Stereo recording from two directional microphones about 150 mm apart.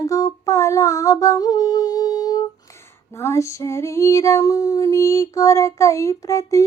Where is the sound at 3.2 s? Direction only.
20° left (ahead or behind).